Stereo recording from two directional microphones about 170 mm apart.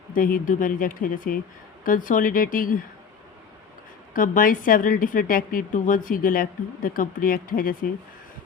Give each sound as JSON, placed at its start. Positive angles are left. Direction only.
{"t": 0.1, "sound": "speech", "side_deg": 55}
{"t": 4.1, "sound": "a woman's voice", "side_deg": 55}